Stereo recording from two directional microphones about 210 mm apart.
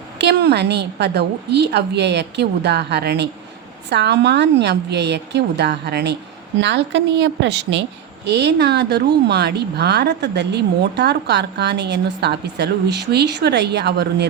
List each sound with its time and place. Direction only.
0.2 s a woman's voice: 55° right (ahead or behind)